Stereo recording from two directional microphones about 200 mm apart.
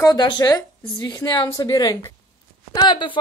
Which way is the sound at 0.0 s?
20° left (ahead or behind).